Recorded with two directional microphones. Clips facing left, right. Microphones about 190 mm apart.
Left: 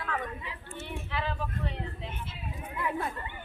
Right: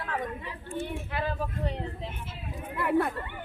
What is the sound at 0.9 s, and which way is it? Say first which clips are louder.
Vehicle: right 3 dB; 45° right (ahead or behind).